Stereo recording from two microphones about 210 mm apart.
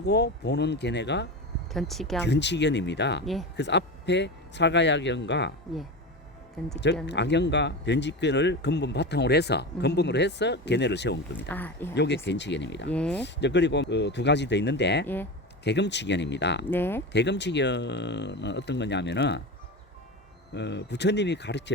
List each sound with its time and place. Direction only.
0.0 s speech: 50° left (ahead or behind)
1.7 s speech: centre (ahead or behind)
2.2 s speech: 55° left (ahead or behind)
7.1 s speech: 55° left (ahead or behind)
11.3 s speech: 10° left (ahead or behind)
11.9 s speech: 55° left (ahead or behind)
12.9 s speech: 5° left (ahead or behind)
13.1 s speech: 55° left (ahead or behind)
15.0 s speech: 10° left (ahead or behind)
15.6 s speech: 55° left (ahead or behind)
16.6 s speech: 10° left (ahead or behind)
17.1 s speech: 55° left (ahead or behind)
20.5 s speech: 55° left (ahead or behind)